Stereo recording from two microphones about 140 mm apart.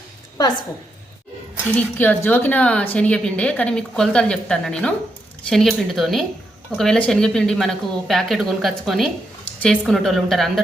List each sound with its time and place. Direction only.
0.4 s a woman's voice: 30° left (ahead or behind)
1.6 s a woman's voice: 15° left (ahead or behind)